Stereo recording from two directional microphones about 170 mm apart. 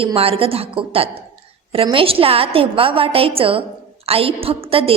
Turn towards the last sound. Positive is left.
turn(degrees=-35)  # may be behind; listen again after turning